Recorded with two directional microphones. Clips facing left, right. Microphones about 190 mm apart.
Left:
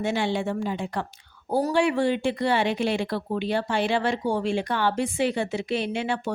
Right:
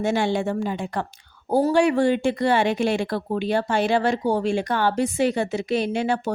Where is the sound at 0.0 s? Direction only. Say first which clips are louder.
Right 3 dB; 45° right (ahead or behind).